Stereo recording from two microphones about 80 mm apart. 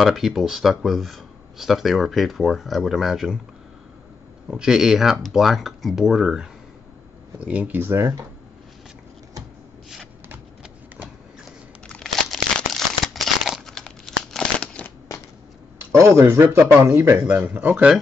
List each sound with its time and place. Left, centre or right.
0.0 s speech: centre
4.5 s speech: centre
7.3 s speech: centre
11.9 s crumpling: centre
15.9 s speech: right
17.4 s speech: centre